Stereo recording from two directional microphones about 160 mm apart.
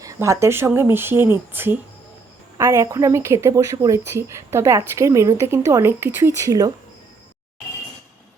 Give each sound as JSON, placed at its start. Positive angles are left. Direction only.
{"t": 0.0, "sound": "a woman's voice", "side_deg": -20}